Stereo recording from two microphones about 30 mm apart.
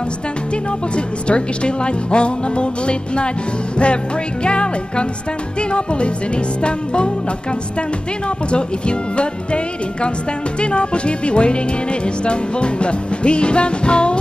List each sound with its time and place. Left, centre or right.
0.9 s speech: left
8.5 s speech: left
10.6 s speech: left